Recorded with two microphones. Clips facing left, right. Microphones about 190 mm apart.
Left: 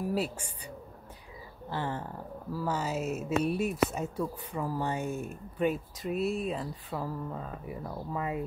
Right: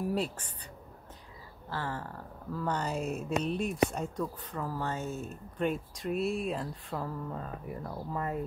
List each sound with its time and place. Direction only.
0.0 s speech: 5° left (ahead or behind)
1.7 s speech: 20° left (ahead or behind)
2.5 s speech: 5° left (ahead or behind)